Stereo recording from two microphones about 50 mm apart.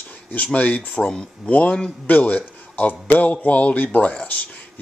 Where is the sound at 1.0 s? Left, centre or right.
Centre.